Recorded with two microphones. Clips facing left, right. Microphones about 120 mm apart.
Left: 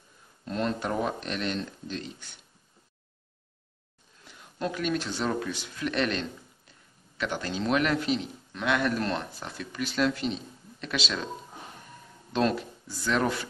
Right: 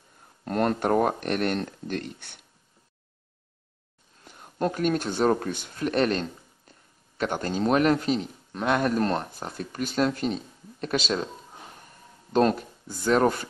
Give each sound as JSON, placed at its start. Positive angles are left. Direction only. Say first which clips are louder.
{"t": 0.5, "sound": "speech", "louder": "right 6 dB", "side_deg": -55}
{"t": 4.2, "sound": "a man's voice", "louder": "right 5 dB", "side_deg": -45}
{"t": 12.3, "sound": "speech", "louder": "right 4 dB", "side_deg": -45}